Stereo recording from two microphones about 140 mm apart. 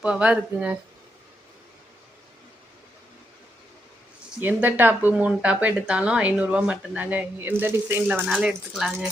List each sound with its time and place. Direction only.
0.0 s speech: 5° right (ahead or behind)
4.4 s speech: 15° right (ahead or behind)